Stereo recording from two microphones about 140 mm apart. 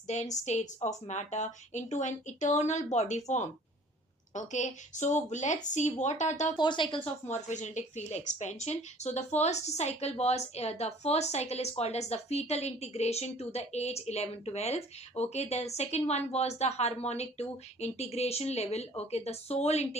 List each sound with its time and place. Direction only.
0.1 s speech: 55° left (ahead or behind)
6.6 s speech: 35° left (ahead or behind)
7.3 s a woman's voice: 60° left (ahead or behind)